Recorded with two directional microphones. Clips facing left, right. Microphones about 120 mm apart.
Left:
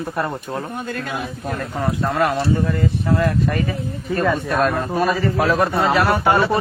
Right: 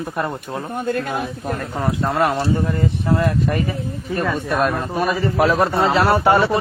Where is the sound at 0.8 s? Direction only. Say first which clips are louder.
Right 4 dB; 55° right (ahead or behind).